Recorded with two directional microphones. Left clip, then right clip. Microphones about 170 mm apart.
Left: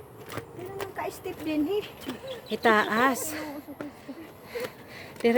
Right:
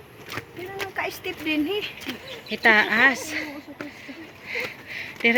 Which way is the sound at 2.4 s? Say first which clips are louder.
Right 5 dB; 15° left (ahead or behind).